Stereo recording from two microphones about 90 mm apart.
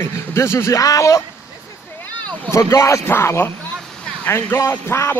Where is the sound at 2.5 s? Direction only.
35° left (ahead or behind).